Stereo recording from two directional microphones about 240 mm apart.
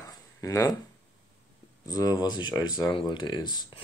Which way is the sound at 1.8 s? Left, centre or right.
Centre.